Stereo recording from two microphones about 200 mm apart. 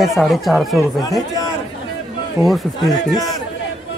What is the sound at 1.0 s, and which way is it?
Speech, 20° left (ahead or behind).